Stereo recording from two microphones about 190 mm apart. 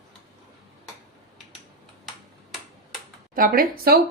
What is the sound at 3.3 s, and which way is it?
Speech, 50° right (ahead or behind).